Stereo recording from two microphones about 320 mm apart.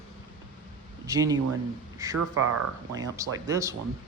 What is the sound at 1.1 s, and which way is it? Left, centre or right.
A man's voice, centre.